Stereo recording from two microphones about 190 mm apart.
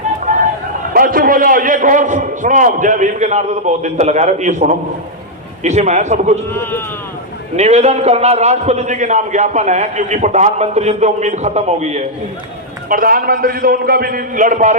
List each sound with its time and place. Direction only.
0.3 s a sound: 45° right (ahead or behind)
0.9 s a man's voice: 45° right (ahead or behind)
6.5 s speech: 10° left (ahead or behind)
7.5 s a man's voice: 35° right (ahead or behind)
12.9 s a man's voice: 50° right (ahead or behind)